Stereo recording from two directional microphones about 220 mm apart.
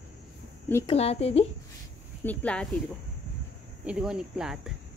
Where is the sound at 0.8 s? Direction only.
25° left (ahead or behind).